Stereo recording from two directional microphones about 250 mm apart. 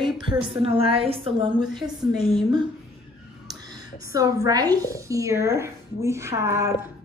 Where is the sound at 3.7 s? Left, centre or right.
Centre.